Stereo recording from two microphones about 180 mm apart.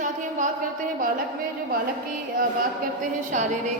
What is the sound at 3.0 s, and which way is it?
Speech, 40° right (ahead or behind).